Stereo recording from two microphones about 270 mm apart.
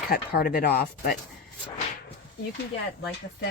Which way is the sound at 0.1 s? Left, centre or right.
Left.